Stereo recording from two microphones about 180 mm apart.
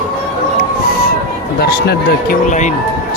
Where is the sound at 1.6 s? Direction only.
60° left (ahead or behind).